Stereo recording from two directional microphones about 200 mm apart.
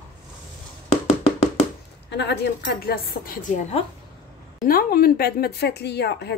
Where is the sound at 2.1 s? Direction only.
55° left (ahead or behind).